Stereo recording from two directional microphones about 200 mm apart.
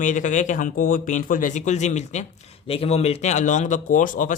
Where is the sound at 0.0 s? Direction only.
40° left (ahead or behind).